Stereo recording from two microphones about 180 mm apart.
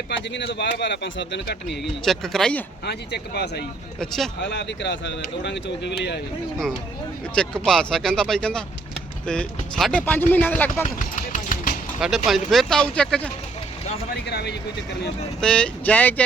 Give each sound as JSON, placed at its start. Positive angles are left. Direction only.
{"t": 0.1, "sound": "speech", "side_deg": 80}
{"t": 1.7, "sound": "speech", "side_deg": 0}
{"t": 2.8, "sound": "speech", "side_deg": 65}
{"t": 4.0, "sound": "speech", "side_deg": 0}
{"t": 4.4, "sound": "speech", "side_deg": 75}
{"t": 7.3, "sound": "speech", "side_deg": 5}
{"t": 10.8, "sound": "a sound", "side_deg": 45}
{"t": 11.9, "sound": "speech", "side_deg": 0}
{"t": 14.3, "sound": "speech", "side_deg": 65}
{"t": 15.4, "sound": "speech", "side_deg": 5}